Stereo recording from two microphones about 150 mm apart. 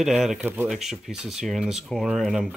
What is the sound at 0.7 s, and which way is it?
Speech, centre (ahead or behind).